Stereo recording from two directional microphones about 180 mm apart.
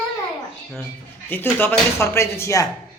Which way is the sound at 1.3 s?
10° left (ahead or behind).